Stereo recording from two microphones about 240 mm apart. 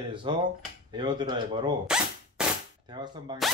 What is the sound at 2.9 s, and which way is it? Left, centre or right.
Speech, centre.